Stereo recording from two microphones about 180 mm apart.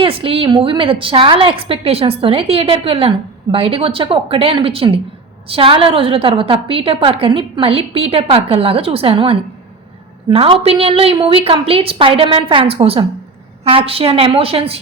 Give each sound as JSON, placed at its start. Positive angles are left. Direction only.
{"t": 0.0, "sound": "a woman's voice", "side_deg": -30}